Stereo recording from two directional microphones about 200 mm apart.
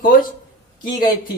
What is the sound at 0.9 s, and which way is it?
Speech, 20° left (ahead or behind).